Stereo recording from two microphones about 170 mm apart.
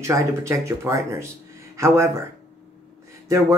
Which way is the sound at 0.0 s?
15° right (ahead or behind).